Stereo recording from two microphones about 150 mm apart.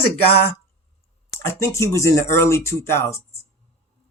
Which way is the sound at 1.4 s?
20° left (ahead or behind).